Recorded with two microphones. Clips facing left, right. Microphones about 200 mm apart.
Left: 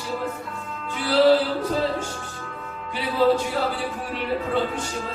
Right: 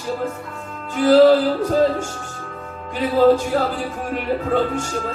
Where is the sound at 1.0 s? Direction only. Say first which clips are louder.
Right 6 dB; 45° right (ahead or behind).